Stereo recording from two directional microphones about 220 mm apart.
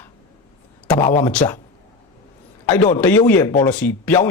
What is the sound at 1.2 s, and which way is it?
Speech, 5° left (ahead or behind).